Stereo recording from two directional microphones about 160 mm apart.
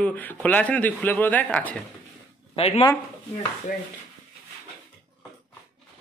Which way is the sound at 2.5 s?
35° left (ahead or behind).